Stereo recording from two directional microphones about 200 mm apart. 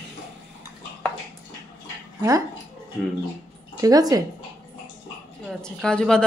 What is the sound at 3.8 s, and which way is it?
Speech, 20° right (ahead or behind).